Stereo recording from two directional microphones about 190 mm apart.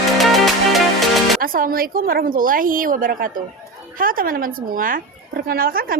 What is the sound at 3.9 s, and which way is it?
Speech, 50° right (ahead or behind).